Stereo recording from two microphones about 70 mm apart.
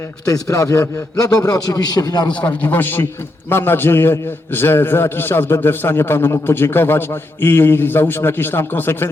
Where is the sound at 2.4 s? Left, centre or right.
Left.